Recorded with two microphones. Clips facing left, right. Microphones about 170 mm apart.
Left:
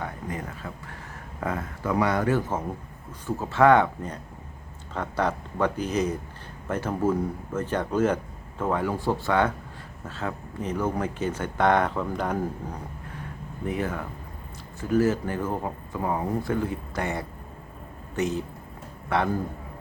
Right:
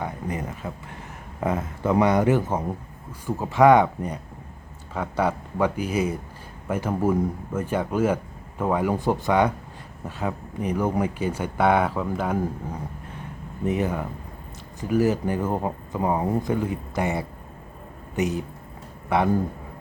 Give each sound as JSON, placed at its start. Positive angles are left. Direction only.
{"t": 0.0, "sound": "speech", "side_deg": -20}
{"t": 13.7, "sound": "a man's voice", "side_deg": -20}